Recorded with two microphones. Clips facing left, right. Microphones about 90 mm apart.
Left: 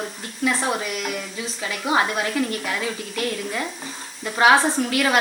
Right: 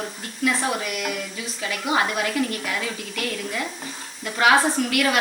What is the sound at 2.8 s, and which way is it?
A woman's voice, 30° left (ahead or behind).